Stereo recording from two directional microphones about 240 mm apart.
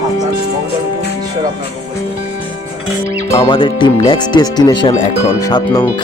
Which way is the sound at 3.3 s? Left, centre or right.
Left.